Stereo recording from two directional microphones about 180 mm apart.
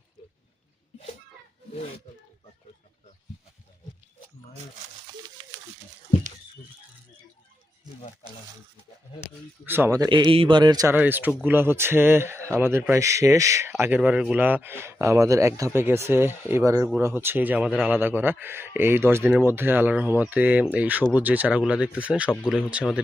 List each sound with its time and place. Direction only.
9.6 s a man's voice: 10° right (ahead or behind)
10.9 s speech: 10° right (ahead or behind)